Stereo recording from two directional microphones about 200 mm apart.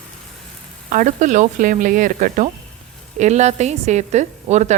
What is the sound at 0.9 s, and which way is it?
A woman's voice, 40° right (ahead or behind).